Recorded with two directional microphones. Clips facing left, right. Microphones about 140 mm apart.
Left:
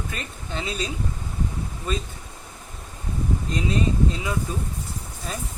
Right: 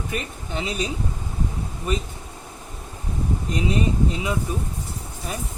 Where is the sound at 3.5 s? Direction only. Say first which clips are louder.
Right 2 dB; 20° right (ahead or behind).